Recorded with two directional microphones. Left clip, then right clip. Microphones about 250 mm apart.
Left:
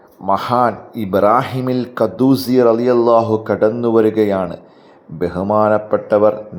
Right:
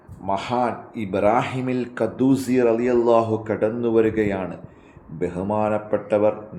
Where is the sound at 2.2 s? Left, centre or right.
Left.